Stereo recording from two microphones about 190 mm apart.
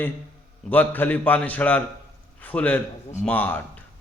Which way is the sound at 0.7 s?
10° left (ahead or behind).